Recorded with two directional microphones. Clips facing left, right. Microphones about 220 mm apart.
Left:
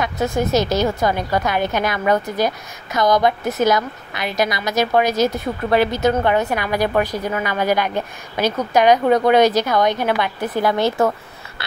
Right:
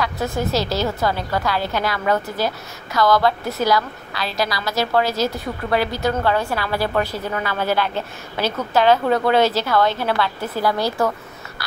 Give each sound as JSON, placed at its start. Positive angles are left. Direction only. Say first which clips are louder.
{"t": 0.4, "sound": "a woman's voice", "louder": "left 4 dB", "side_deg": 20}